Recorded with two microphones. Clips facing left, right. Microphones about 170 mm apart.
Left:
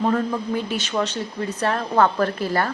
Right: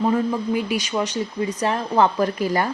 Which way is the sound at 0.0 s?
10° right (ahead or behind).